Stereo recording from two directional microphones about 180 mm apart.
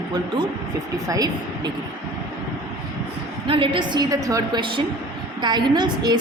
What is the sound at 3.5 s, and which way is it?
A woman's voice, 30° right (ahead or behind).